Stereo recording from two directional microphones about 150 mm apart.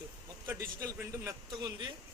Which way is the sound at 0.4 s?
20° right (ahead or behind).